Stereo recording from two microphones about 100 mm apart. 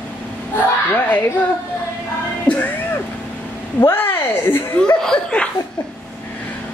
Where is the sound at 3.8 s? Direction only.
20° left (ahead or behind).